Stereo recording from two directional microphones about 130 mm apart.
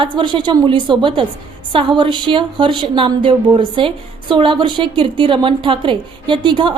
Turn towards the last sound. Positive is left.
turn(degrees=-40)  # may be behind; listen again after turning